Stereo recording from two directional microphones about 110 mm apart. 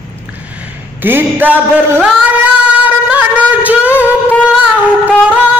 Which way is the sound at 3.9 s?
20° left (ahead or behind).